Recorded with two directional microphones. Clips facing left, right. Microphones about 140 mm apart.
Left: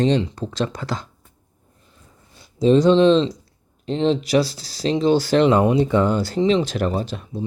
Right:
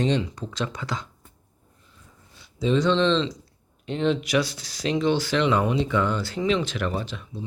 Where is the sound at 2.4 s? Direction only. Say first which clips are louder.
Left 7 dB; 40° left (ahead or behind).